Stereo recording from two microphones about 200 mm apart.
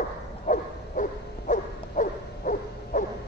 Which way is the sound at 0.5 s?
35° left (ahead or behind).